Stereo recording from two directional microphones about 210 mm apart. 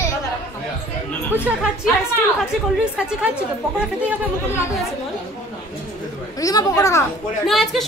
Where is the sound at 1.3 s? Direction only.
5° right (ahead or behind).